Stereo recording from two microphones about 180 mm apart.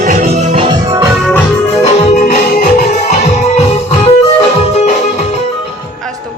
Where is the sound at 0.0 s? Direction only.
45° right (ahead or behind); by 1.0 s 25° right (ahead or behind).